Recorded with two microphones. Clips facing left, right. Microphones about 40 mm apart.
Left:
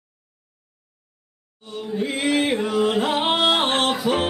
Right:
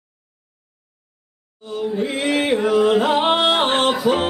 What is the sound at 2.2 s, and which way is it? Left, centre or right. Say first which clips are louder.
Music: right 3 dB; centre.